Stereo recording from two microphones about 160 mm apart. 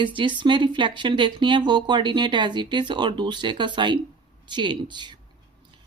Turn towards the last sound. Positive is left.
turn(degrees=-30)  # may be behind; listen again after turning